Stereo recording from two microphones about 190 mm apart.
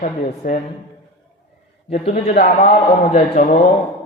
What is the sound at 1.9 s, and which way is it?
A man's voice, 35° left (ahead or behind).